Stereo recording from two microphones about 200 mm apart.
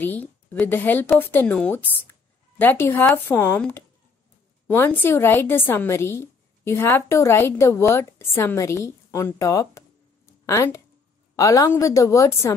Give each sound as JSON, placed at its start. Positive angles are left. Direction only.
{"t": 0.0, "sound": "a woman's voice", "side_deg": 10}